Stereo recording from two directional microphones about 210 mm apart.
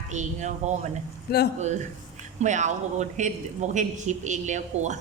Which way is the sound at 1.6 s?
35° right (ahead or behind).